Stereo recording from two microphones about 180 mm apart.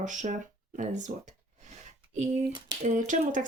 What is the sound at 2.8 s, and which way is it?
Speech, 45° right (ahead or behind).